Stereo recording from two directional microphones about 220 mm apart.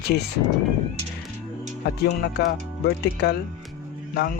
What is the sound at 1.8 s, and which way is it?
Speech, 50° left (ahead or behind).